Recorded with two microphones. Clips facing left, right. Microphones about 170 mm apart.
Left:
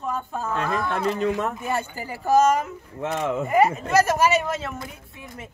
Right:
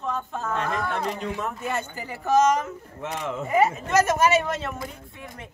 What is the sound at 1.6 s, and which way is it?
Speech, 10° left (ahead or behind).